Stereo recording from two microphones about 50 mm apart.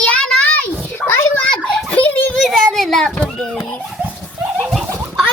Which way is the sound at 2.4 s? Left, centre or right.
Centre.